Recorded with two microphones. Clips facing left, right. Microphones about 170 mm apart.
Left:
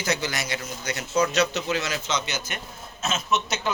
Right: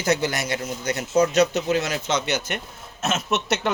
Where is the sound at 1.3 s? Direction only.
50° right (ahead or behind).